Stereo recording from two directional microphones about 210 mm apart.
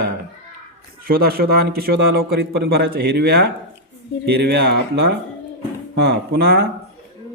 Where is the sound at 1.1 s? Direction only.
45° right (ahead or behind).